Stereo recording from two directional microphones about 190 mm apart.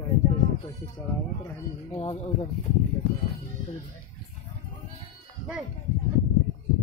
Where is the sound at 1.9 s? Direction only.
30° left (ahead or behind).